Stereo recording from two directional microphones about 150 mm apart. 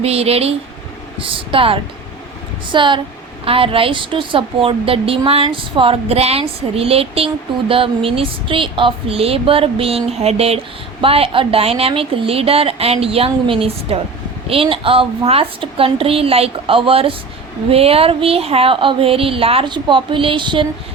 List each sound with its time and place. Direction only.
0.0 s a woman's voice: 40° right (ahead or behind)